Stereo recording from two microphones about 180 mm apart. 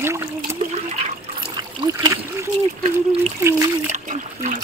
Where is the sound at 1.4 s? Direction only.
20° right (ahead or behind).